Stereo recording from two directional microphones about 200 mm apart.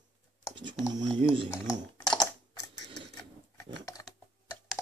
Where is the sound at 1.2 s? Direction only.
25° right (ahead or behind).